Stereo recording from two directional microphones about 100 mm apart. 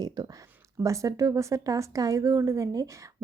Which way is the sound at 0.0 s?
40° right (ahead or behind).